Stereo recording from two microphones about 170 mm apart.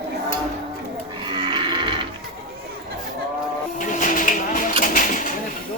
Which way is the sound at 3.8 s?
50° left (ahead or behind).